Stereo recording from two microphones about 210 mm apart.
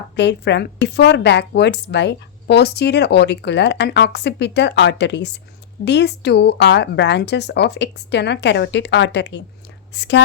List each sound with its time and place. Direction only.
0.2 s speech: 55° left (ahead or behind)